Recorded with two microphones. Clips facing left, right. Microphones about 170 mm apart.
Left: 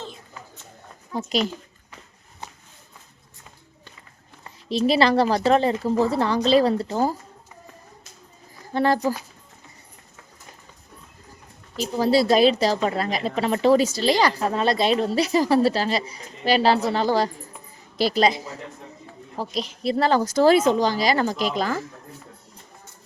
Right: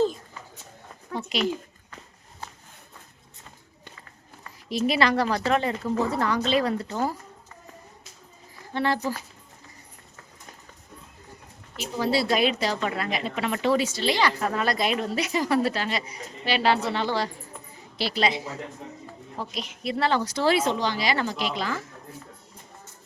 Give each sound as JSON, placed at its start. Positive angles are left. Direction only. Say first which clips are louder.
{"t": 1.1, "sound": "a child's voice", "louder": "left 4 dB", "side_deg": 40}
{"t": 4.9, "sound": "speech", "louder": "left 5 dB", "side_deg": 30}
{"t": 8.7, "sound": "speech", "louder": "left 5 dB", "side_deg": 40}
{"t": 11.8, "sound": "speech", "louder": "left 6 dB", "side_deg": 40}